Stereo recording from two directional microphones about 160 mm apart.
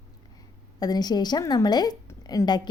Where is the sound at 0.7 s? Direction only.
25° left (ahead or behind).